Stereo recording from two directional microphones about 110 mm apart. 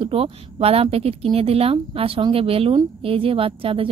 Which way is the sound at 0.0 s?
60° right (ahead or behind).